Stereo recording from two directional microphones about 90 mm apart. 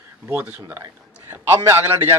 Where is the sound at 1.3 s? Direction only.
30° right (ahead or behind).